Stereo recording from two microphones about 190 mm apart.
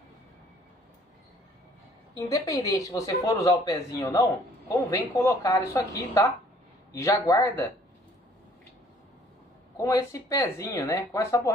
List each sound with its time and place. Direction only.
2.1 s speech: 15° left (ahead or behind)
9.8 s speech: 15° left (ahead or behind)